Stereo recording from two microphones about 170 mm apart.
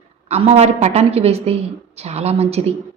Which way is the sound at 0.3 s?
40° right (ahead or behind).